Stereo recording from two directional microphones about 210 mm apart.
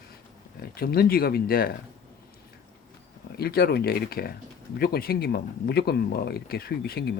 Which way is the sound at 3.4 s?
45° left (ahead or behind).